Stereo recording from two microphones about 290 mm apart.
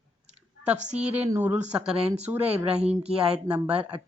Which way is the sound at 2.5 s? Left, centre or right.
Right.